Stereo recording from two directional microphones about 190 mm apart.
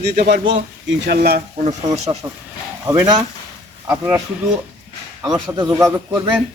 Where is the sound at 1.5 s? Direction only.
35° right (ahead or behind).